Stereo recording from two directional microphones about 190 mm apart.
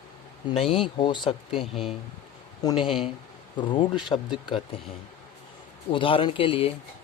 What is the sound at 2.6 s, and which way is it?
Speech, 20° left (ahead or behind).